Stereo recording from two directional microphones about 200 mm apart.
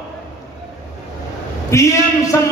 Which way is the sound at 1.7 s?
15° left (ahead or behind).